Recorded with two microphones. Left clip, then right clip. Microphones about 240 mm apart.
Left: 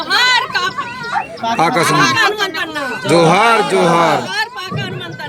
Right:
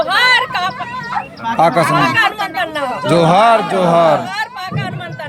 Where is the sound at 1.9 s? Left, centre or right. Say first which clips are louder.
Left 1 dB; centre.